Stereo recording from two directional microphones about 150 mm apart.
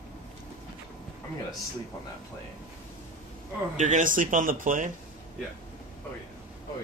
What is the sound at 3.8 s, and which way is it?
Speech, 60° right (ahead or behind).